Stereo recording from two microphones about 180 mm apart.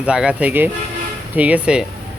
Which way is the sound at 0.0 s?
5° right (ahead or behind).